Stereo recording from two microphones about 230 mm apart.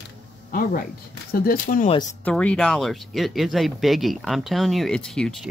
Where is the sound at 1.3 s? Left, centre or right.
Left.